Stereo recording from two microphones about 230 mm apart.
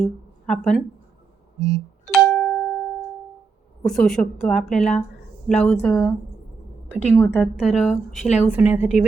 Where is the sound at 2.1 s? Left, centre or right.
Centre.